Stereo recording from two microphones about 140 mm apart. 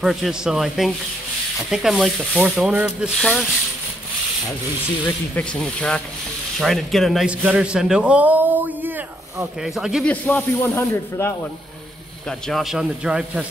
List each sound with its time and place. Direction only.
0.0 s speech: centre (ahead or behind)
5.3 s a man's voice: 10° left (ahead or behind)
10.0 s speech: 10° left (ahead or behind)
12.3 s speech: centre (ahead or behind)